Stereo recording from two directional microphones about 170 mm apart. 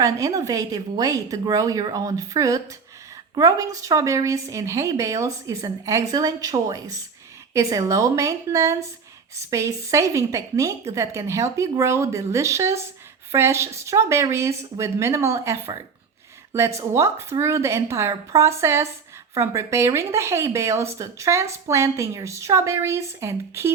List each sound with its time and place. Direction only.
0.0 s a woman's voice: 20° right (ahead or behind)